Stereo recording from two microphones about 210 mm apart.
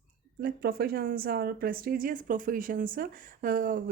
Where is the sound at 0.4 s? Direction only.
45° right (ahead or behind).